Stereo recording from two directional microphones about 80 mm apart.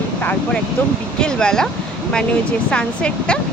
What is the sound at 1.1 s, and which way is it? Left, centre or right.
Speech, centre.